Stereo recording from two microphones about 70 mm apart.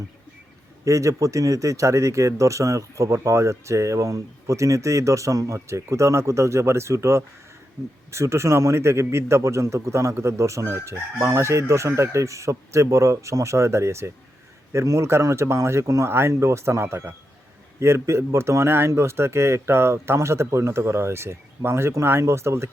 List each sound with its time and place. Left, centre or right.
0.9 s speech: right